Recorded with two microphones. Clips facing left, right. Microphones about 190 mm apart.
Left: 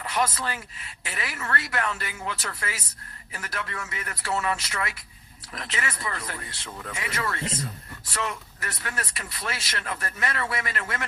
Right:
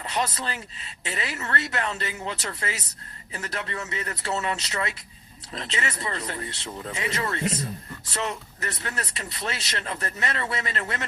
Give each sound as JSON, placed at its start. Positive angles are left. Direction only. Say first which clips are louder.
{"t": 0.0, "sound": "speech", "louder": "left 1 dB", "side_deg": -25}